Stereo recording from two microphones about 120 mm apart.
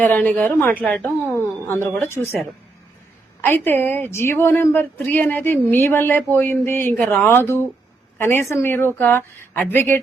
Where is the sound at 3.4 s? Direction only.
20° left (ahead or behind).